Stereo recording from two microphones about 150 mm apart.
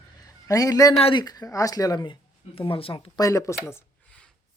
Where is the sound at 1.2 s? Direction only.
25° left (ahead or behind).